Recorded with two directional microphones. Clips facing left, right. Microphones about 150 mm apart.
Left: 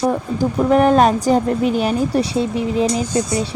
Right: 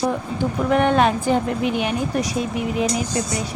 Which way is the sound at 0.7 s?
35° left (ahead or behind).